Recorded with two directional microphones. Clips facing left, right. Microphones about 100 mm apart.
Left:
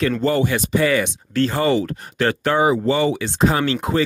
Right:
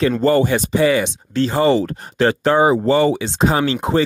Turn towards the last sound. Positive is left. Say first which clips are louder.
# right 2 dB
turn(degrees=-25)  # may be behind; listen again after turning